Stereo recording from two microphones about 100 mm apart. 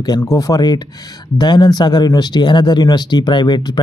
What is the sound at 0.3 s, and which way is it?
Speech, 40° left (ahead or behind).